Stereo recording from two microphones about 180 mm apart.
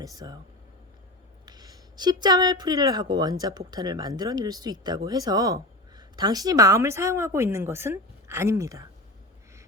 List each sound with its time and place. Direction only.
0.0 s speech: 20° right (ahead or behind)
1.5 s speech: 20° right (ahead or behind)